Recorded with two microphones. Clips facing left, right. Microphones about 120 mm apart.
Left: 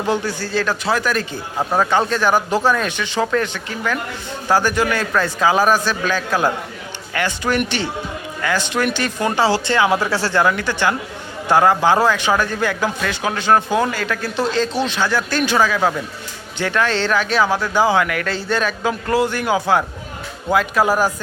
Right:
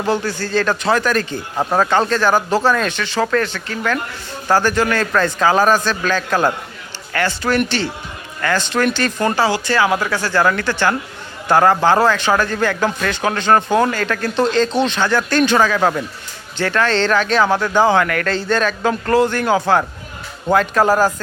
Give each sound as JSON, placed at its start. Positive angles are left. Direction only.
{"t": 0.1, "sound": "a man's voice", "side_deg": 15}
{"t": 9.4, "sound": "speech", "side_deg": 25}
{"t": 10.4, "sound": "a man's voice", "side_deg": 15}